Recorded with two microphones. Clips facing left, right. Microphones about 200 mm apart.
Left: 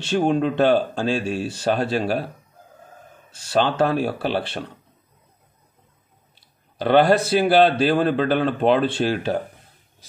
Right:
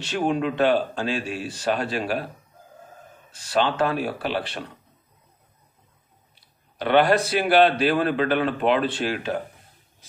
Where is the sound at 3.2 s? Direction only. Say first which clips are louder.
Left 2 dB; 30° left (ahead or behind).